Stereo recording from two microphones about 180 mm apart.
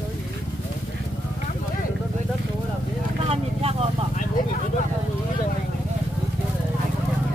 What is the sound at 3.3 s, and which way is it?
Vehicle, 35° right (ahead or behind).